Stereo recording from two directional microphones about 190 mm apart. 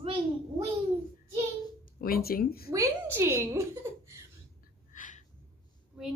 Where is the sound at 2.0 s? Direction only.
50° left (ahead or behind).